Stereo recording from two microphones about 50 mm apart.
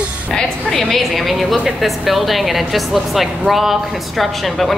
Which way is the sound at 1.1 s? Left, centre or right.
Centre.